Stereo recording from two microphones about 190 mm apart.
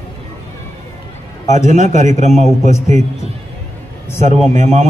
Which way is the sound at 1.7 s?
40° right (ahead or behind).